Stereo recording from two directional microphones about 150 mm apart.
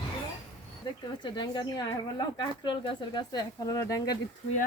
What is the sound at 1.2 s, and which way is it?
Speech, 30° left (ahead or behind).